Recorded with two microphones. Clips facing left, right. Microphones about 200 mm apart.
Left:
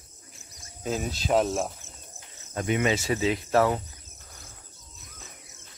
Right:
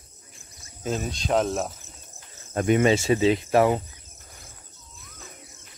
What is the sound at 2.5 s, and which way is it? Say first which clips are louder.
Speech: right 6 dB; 45° right (ahead or behind).